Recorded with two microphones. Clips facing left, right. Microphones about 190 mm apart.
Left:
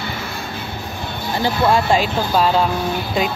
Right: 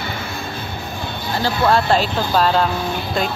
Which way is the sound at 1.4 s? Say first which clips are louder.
Even; 10° left (ahead or behind).